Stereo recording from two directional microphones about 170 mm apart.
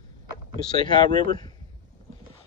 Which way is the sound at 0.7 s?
25° left (ahead or behind).